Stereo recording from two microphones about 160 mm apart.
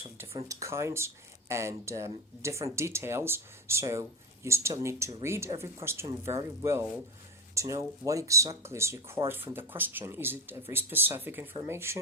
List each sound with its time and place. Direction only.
0.4 s speech: 20° right (ahead or behind)